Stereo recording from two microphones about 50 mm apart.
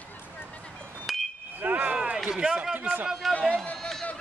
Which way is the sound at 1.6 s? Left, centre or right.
Right.